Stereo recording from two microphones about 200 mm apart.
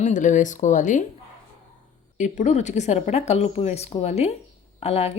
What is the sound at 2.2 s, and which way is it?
A woman's voice, 40° left (ahead or behind).